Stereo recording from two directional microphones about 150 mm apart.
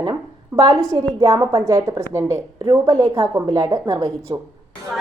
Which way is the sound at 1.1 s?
25° right (ahead or behind).